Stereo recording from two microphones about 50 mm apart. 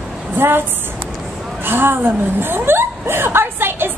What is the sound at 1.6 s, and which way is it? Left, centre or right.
A woman's voice, right.